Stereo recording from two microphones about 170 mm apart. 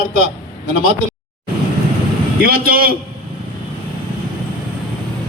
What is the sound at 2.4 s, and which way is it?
Speech, 60° right (ahead or behind).